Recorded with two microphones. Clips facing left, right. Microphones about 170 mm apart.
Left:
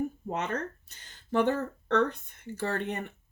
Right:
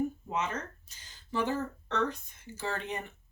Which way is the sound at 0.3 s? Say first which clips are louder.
Left 2 dB; 60° left (ahead or behind).